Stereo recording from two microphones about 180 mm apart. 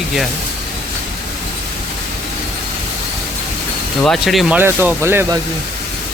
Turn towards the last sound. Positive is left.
turn(degrees=-15)  # may be behind; listen again after turning